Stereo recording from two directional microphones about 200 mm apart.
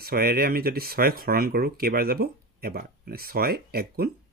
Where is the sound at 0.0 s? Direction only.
50° right (ahead or behind).